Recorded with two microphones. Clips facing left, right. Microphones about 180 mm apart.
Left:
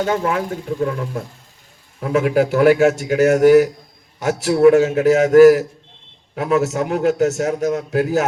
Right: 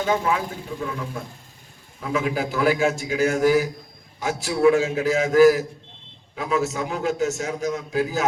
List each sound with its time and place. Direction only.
0.1 s a man's voice: 55° left (ahead or behind)
7.4 s a man's voice: 55° left (ahead or behind)